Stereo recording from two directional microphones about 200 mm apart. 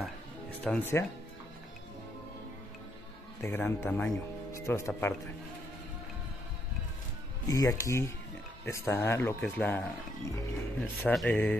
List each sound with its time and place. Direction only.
0.0 s music: 5° left (ahead or behind)
3.4 s speech: 10° left (ahead or behind)
7.4 s speech: 15° left (ahead or behind)